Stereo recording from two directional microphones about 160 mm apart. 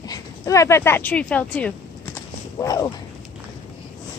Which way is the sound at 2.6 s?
20° left (ahead or behind).